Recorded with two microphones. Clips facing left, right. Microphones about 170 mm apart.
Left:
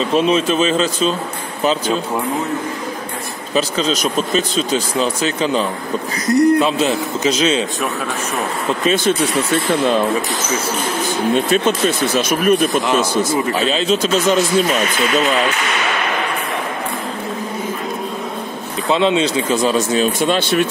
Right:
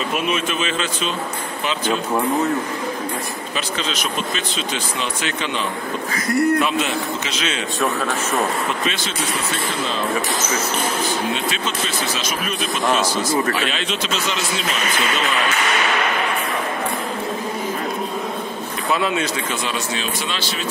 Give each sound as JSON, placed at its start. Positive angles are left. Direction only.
{"t": 0.1, "sound": "speech", "side_deg": 30}
{"t": 3.5, "sound": "speech", "side_deg": 40}
{"t": 6.2, "sound": "speech", "side_deg": 20}
{"t": 7.2, "sound": "speech", "side_deg": 35}
{"t": 11.3, "sound": "speech", "side_deg": 50}
{"t": 13.5, "sound": "speech", "side_deg": 30}
{"t": 18.9, "sound": "speech", "side_deg": 25}
{"t": 19.6, "sound": "speech", "side_deg": 40}